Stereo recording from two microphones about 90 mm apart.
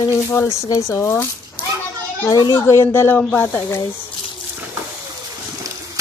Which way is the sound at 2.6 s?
30° left (ahead or behind).